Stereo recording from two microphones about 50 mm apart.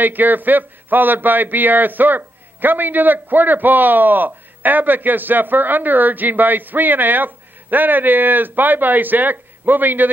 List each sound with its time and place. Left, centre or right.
0.0 s a man's voice: right